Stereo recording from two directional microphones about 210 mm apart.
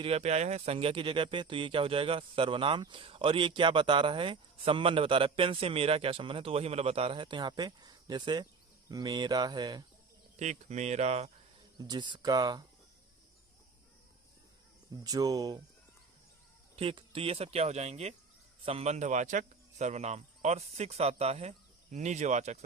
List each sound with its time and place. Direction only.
0.0 s speech: 30° right (ahead or behind)
10.3 s speech: 35° right (ahead or behind)
11.8 s speech: 20° right (ahead or behind)
15.0 s speech: 15° right (ahead or behind)
16.7 s a man's voice: 25° right (ahead or behind)